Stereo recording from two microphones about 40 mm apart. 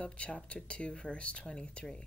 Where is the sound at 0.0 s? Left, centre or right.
Left.